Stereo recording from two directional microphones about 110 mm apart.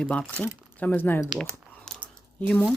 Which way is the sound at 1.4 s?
10° left (ahead or behind).